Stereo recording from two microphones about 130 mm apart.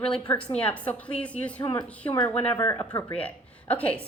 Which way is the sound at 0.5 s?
10° left (ahead or behind).